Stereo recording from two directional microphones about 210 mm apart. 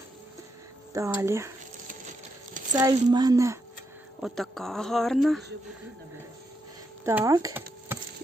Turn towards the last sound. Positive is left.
turn(degrees=-15)  # may be behind; listen again after turning